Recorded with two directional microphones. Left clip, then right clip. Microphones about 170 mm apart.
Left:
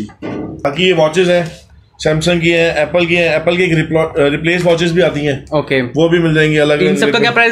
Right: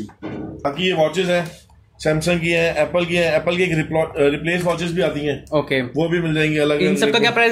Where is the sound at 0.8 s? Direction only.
20° left (ahead or behind).